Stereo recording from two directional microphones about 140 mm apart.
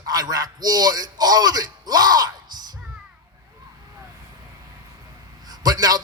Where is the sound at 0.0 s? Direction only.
30° right (ahead or behind).